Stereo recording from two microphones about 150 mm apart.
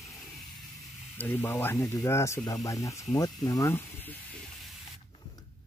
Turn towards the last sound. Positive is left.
turn(degrees=15)  # may be behind; listen again after turning